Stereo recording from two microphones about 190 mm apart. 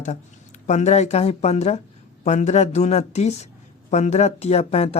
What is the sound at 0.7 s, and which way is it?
Speech, 35° left (ahead or behind).